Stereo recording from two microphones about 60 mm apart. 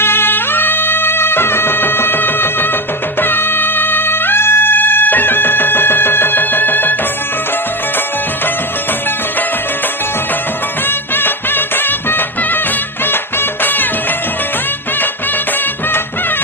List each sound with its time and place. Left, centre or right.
0.0 s music: left
10.8 s music: left
13.6 s music: left